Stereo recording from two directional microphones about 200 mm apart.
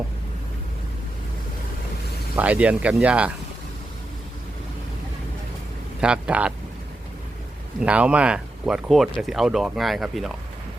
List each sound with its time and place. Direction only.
2.3 s speech: 5° right (ahead or behind)
6.0 s speech: 5° right (ahead or behind)
7.8 s speech: 5° right (ahead or behind)